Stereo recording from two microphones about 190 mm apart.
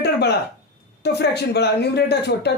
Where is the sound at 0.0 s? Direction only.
60° left (ahead or behind).